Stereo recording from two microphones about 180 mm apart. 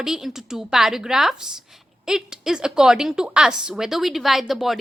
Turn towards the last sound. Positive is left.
turn(degrees=0)  # may be behind; listen again after turning